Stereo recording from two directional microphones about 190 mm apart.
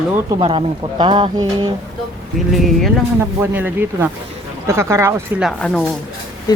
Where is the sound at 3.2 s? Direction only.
10° right (ahead or behind).